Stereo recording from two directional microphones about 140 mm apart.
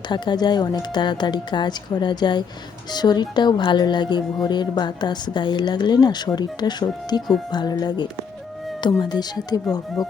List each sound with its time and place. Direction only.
0.1 s a woman's voice: 30° left (ahead or behind)